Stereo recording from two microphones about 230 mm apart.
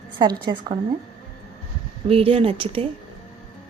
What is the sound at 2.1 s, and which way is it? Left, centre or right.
Speech, right.